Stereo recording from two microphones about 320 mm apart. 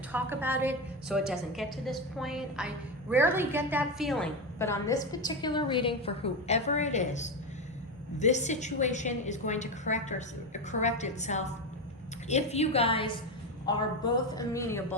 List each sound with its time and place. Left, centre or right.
0.1 s a woman's voice: centre